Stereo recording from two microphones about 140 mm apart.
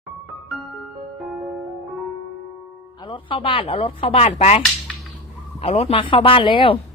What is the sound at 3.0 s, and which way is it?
Speech, 35° left (ahead or behind).